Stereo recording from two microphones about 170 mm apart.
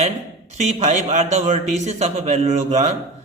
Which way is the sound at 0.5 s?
45° right (ahead or behind).